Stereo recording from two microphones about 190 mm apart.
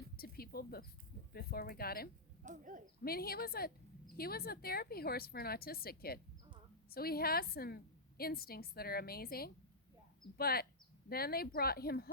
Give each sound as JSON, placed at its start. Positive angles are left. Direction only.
{"t": 0.2, "sound": "a sound", "side_deg": 55}
{"t": 1.3, "sound": "a woman's voice", "side_deg": 55}
{"t": 2.4, "sound": "owl", "side_deg": -40}
{"t": 3.0, "sound": "a woman's voice", "side_deg": 55}